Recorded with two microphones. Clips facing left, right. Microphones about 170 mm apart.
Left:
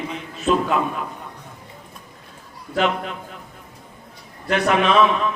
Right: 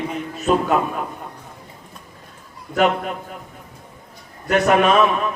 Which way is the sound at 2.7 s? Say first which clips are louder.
Right 3 dB; 45° right (ahead or behind).